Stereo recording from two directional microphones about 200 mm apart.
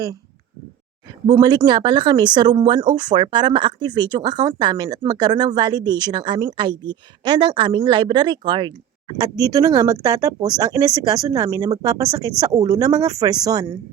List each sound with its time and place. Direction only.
1.3 s speech: 20° right (ahead or behind)